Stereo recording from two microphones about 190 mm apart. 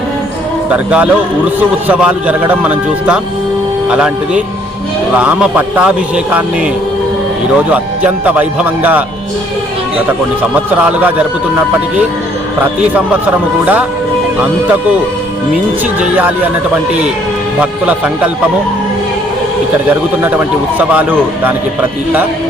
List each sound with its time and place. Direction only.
0.7 s speech: 5° right (ahead or behind)
7.5 s speech: 5° right (ahead or behind)
10.1 s speech: 10° right (ahead or behind)
15.5 s speech: 10° right (ahead or behind)
17.6 s speech: 5° right (ahead or behind)
20.2 s speech: 10° right (ahead or behind)